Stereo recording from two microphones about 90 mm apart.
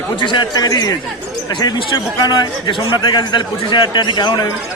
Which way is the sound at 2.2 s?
55° left (ahead or behind).